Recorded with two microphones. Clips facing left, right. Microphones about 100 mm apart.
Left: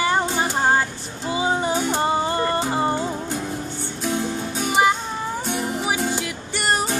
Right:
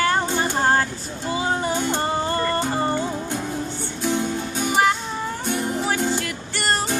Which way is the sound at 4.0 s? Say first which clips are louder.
Right 1 dB; centre (ahead or behind).